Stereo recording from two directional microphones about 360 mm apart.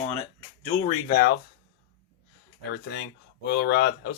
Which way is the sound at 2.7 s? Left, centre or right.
Left.